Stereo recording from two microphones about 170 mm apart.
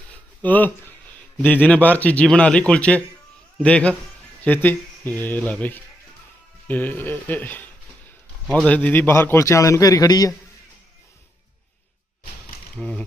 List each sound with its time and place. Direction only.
0.1 s a sound: 10° left (ahead or behind)
1.4 s a man's voice: 10° left (ahead or behind)
12.7 s speech: 5° left (ahead or behind)